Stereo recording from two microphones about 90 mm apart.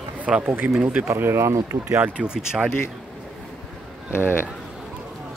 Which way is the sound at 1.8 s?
20° right (ahead or behind).